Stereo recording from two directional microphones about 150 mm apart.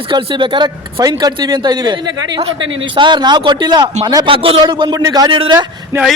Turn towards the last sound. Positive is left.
turn(degrees=-20)  # may be behind; listen again after turning